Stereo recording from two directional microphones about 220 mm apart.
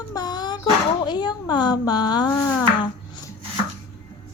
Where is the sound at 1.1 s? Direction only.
20° left (ahead or behind).